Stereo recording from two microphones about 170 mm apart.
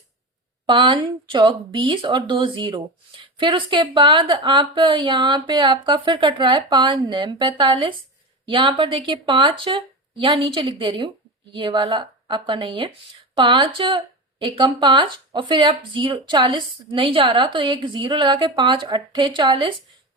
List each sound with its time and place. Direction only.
0.6 s speech: 30° right (ahead or behind)